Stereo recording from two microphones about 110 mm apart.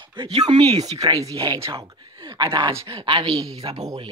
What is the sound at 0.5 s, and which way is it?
Speech, 45° right (ahead or behind).